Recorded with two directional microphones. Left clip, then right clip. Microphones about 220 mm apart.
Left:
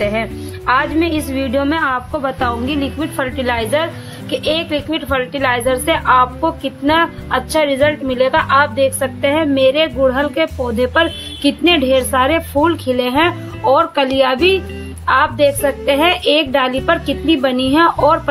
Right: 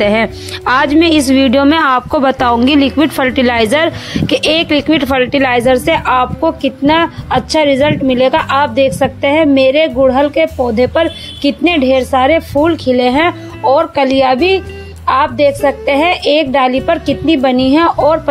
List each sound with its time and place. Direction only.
0.0 s a woman's voice: 40° right (ahead or behind); by 18.3 s 15° right (ahead or behind)